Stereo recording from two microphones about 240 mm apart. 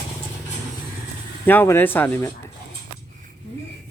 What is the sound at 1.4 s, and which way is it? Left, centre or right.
Speech, centre.